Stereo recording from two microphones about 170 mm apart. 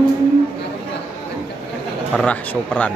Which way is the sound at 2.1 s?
10° left (ahead or behind).